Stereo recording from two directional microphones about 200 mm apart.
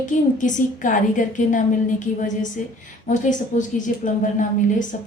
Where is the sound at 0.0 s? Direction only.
40° left (ahead or behind).